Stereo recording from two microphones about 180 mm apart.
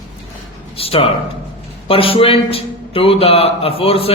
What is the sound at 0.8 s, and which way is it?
A man's voice, 30° left (ahead or behind).